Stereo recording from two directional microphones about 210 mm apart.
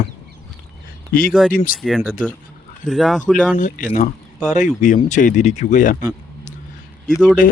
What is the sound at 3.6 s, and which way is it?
Speech, 40° left (ahead or behind).